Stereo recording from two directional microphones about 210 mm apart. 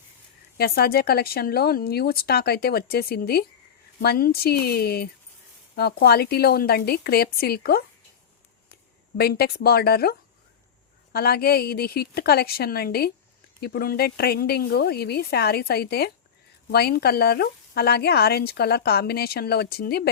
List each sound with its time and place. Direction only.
0.5 s speech: 50° left (ahead or behind)